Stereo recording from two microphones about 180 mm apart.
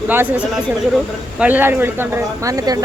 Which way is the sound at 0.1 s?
10° right (ahead or behind).